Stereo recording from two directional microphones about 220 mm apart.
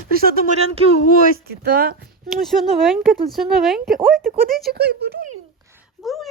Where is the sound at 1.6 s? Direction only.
45° right (ahead or behind).